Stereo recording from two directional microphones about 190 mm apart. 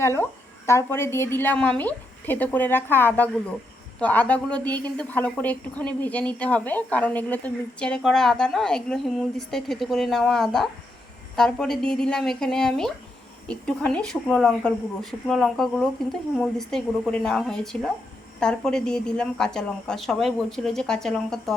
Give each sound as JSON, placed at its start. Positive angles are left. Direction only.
{"t": 0.2, "sound": "a woman's voice", "side_deg": 15}